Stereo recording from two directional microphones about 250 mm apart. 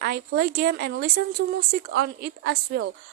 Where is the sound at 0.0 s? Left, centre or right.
Right.